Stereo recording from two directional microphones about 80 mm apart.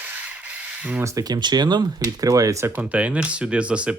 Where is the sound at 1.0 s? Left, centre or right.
Right.